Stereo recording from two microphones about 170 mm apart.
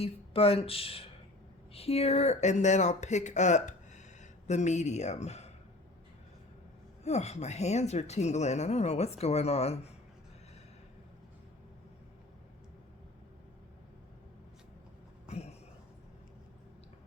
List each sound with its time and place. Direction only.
0.0 s speech: 35° left (ahead or behind)
7.0 s speech: 40° left (ahead or behind)
15.3 s a sound: 40° left (ahead or behind)